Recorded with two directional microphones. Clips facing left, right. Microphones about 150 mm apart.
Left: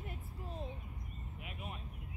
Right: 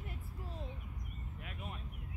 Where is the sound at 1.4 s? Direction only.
10° left (ahead or behind).